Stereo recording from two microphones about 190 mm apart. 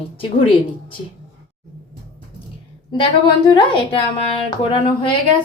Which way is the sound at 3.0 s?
25° left (ahead or behind).